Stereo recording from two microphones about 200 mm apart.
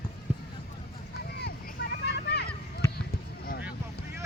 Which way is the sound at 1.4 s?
55° left (ahead or behind).